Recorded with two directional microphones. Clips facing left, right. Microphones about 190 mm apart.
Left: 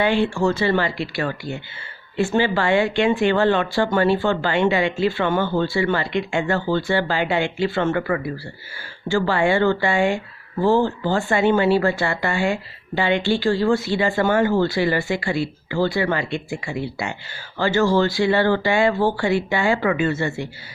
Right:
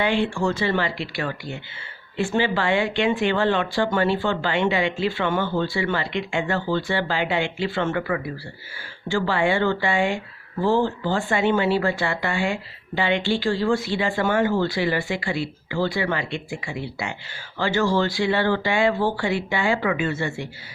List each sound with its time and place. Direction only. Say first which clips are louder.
0.0 s speech: left 3 dB; 40° left (ahead or behind)